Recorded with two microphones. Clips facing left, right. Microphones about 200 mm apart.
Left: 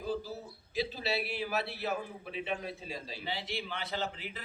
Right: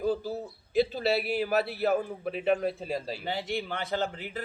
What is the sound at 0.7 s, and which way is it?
A man's voice, 55° right (ahead or behind).